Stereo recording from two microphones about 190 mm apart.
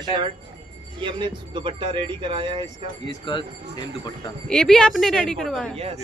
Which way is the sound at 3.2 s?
25° left (ahead or behind).